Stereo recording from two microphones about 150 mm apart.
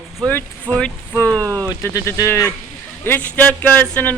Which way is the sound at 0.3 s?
10° left (ahead or behind).